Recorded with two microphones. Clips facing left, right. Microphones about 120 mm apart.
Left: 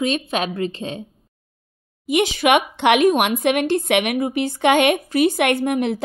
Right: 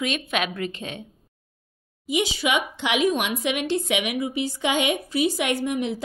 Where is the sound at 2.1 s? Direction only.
60° left (ahead or behind).